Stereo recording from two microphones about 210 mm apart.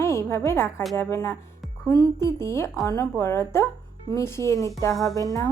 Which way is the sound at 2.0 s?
20° right (ahead or behind).